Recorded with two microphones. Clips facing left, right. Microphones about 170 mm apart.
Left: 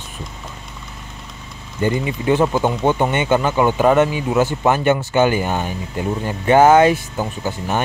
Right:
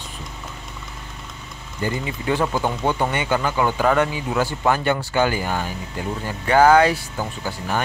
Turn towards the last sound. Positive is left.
turn(degrees=20)  # may be behind; listen again after turning